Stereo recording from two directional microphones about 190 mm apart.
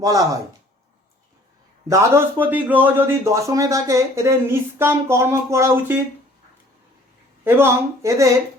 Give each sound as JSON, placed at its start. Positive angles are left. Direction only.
{"t": 0.0, "sound": "speech", "side_deg": -20}
{"t": 1.9, "sound": "speech", "side_deg": -10}
{"t": 7.4, "sound": "speech", "side_deg": -15}